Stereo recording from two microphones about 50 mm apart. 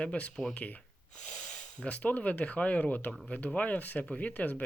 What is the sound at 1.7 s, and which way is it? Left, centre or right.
Speech, left.